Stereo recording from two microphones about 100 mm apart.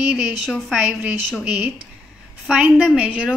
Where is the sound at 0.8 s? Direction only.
15° right (ahead or behind).